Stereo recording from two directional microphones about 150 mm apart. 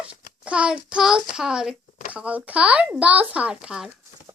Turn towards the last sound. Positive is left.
turn(degrees=-5)  # may be behind; listen again after turning